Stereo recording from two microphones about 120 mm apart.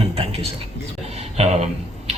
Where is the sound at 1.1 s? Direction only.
60° right (ahead or behind).